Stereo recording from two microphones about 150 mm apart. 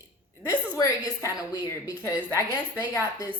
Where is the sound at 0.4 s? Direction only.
20° left (ahead or behind).